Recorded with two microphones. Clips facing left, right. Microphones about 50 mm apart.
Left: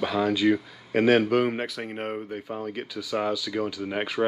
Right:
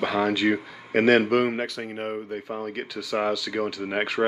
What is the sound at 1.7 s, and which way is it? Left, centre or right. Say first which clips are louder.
Speech: right 1 dB; centre.